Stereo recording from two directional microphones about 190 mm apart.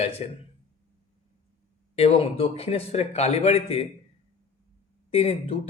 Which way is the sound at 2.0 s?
30° left (ahead or behind).